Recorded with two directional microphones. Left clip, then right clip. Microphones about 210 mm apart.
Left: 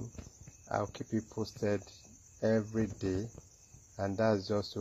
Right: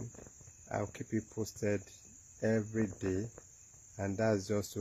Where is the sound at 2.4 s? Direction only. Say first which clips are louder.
Left 2 dB; 30° right (ahead or behind).